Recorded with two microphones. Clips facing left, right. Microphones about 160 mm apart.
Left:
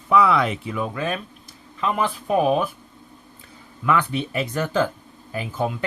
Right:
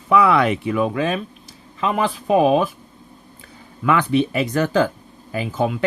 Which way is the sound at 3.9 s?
85° right.